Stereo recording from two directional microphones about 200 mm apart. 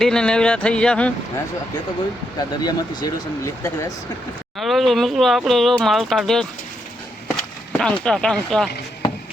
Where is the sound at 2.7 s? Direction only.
20° left (ahead or behind).